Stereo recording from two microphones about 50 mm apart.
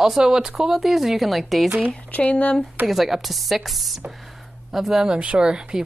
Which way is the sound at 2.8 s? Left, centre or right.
Centre.